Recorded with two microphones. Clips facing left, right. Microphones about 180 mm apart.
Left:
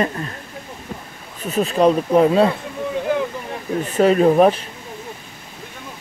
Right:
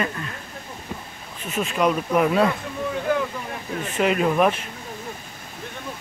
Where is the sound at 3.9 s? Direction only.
35° left (ahead or behind).